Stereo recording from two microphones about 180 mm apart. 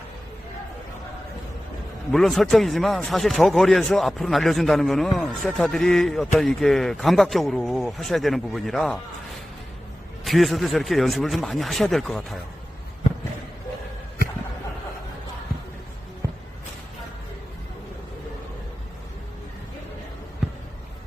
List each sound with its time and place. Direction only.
2.1 s a man's voice: centre (ahead or behind)
10.2 s a man's voice: centre (ahead or behind)
16.2 s basketball bounce: 15° right (ahead or behind)